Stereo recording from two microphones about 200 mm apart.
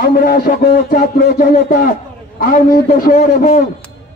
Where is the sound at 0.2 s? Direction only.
50° left (ahead or behind).